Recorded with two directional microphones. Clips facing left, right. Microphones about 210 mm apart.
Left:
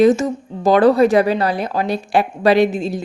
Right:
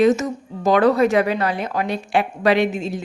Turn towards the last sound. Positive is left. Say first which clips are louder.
# left 4 dB
turn(degrees=35)  # may be behind; listen again after turning